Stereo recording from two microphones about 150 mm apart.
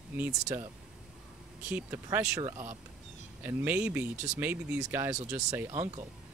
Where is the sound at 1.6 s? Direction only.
10° right (ahead or behind).